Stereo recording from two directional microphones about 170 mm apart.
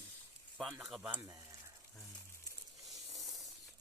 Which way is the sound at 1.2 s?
20° right (ahead or behind).